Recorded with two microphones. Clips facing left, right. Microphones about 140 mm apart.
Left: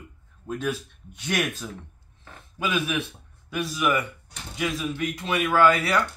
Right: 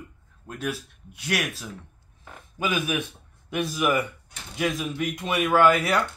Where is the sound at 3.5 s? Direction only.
20° right (ahead or behind).